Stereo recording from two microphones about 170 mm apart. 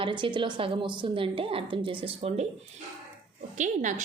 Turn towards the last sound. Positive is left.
turn(degrees=-45)  # may be behind; listen again after turning